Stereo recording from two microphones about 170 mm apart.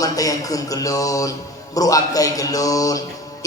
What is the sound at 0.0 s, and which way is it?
Speech, 20° left (ahead or behind).